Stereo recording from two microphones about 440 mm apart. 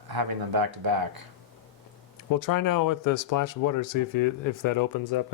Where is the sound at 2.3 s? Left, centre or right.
Left.